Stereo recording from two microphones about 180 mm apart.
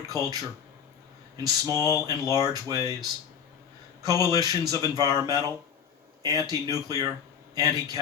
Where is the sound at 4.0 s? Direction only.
20° right (ahead or behind).